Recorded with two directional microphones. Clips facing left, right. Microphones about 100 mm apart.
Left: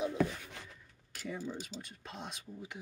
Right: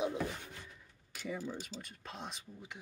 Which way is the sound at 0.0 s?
20° right (ahead or behind).